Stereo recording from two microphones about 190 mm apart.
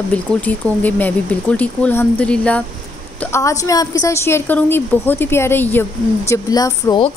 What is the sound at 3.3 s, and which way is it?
Speech, 15° left (ahead or behind).